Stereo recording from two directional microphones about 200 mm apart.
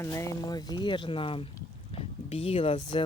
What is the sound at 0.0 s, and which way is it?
Speech, 15° left (ahead or behind).